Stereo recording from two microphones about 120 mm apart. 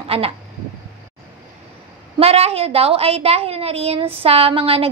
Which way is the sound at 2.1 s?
60° right (ahead or behind).